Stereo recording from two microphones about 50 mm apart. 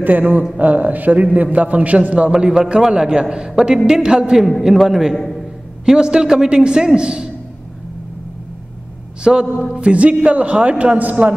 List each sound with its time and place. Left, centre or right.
0.0 s a man's voice: right
2.3 s a man's voice: centre
4.4 s a man's voice: centre
5.1 s a man's voice: centre
5.9 s a man's voice: centre
9.2 s a man's voice: centre; by 11.3 s right